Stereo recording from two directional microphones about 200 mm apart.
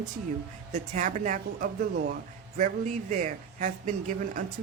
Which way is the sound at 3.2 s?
40° right (ahead or behind).